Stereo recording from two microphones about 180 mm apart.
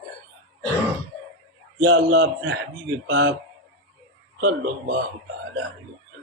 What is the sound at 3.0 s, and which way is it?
Speech, 85° right.